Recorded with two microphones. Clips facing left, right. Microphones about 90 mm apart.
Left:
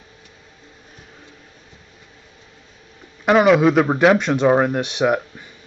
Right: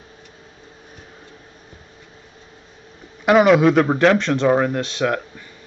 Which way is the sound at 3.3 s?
Centre (ahead or behind).